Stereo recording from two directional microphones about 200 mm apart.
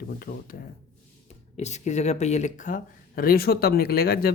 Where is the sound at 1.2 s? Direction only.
35° left (ahead or behind).